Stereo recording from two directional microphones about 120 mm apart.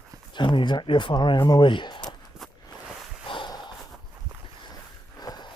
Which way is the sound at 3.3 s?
40° left (ahead or behind).